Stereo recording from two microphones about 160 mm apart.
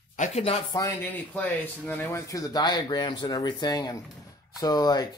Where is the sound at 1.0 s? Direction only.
10° left (ahead or behind).